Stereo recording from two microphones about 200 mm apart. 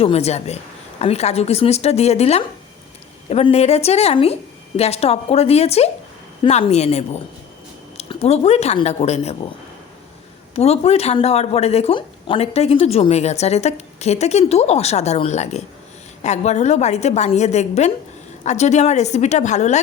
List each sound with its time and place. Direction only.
0.0 s speech: 30° left (ahead or behind)
10.5 s speech: 30° left (ahead or behind)